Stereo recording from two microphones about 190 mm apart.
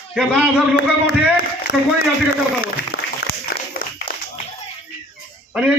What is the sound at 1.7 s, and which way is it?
Speech, 60° left (ahead or behind).